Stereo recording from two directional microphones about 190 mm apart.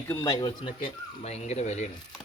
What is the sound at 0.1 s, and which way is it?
Speech, 15° left (ahead or behind).